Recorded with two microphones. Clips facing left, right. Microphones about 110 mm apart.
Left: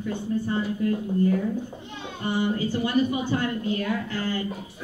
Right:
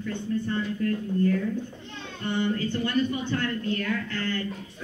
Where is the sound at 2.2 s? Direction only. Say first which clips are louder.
Left 2 dB; 10° left (ahead or behind).